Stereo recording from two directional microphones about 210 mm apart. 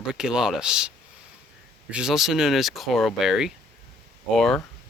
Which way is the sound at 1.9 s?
5° right (ahead or behind).